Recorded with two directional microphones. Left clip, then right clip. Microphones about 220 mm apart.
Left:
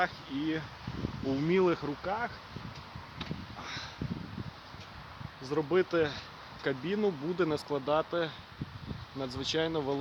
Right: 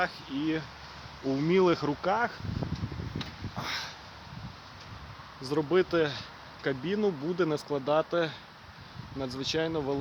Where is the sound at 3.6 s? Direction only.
35° right (ahead or behind).